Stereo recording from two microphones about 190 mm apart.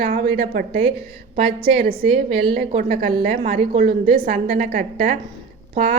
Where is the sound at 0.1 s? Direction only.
50° right (ahead or behind).